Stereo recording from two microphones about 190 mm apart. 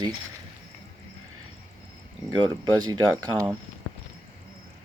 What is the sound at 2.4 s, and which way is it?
Speech, 20° right (ahead or behind).